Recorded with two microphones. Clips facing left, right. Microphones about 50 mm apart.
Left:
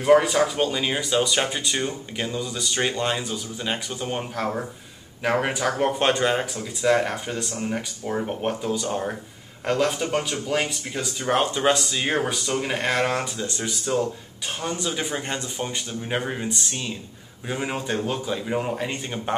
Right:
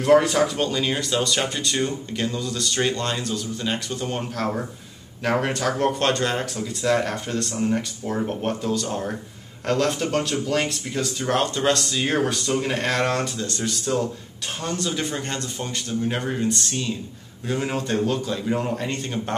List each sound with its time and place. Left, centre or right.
0.0 s speech: centre